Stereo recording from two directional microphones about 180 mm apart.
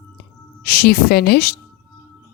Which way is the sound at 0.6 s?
60° left (ahead or behind).